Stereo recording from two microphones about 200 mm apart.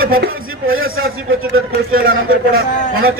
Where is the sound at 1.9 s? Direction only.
45° right (ahead or behind).